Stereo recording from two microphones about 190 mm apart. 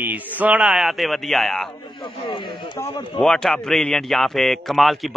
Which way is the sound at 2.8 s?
30° left (ahead or behind).